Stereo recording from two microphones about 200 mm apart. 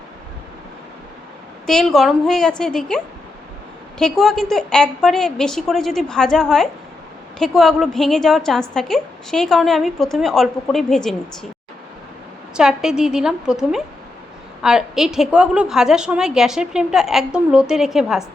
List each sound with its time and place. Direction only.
1.6 s a woman's voice: centre (ahead or behind)
12.5 s a woman's voice: 5° right (ahead or behind)